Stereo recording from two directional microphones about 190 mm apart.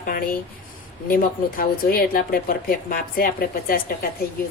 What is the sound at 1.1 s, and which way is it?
Speech, 50° left (ahead or behind).